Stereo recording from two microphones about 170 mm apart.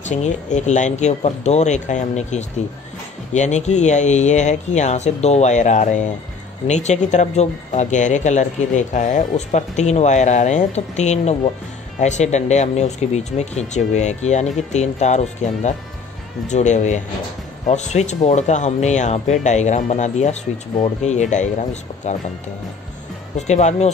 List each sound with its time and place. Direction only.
0.1 s speech: 45° left (ahead or behind)
23.3 s speech: 40° left (ahead or behind)